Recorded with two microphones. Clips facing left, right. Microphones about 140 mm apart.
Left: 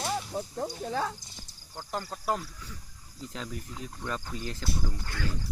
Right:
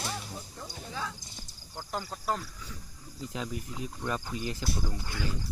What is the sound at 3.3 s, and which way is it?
Speech, 10° right (ahead or behind).